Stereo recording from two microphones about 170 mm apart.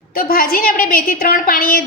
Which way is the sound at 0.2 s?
55° left (ahead or behind).